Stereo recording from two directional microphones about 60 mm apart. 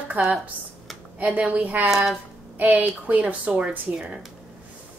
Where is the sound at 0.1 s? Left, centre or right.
Right.